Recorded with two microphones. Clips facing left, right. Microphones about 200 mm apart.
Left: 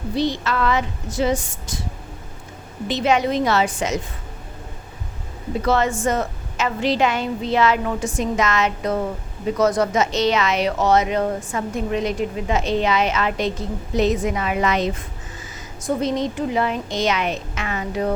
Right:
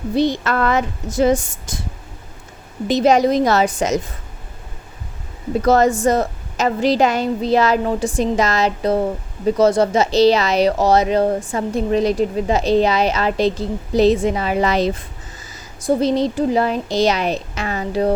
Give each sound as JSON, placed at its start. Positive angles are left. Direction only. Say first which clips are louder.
{"t": 0.2, "sound": "speech", "louder": "right 4 dB", "side_deg": -50}
{"t": 2.8, "sound": "speech", "louder": "right 5 dB", "side_deg": -40}
{"t": 5.6, "sound": "speech", "louder": "right 6 dB", "side_deg": -40}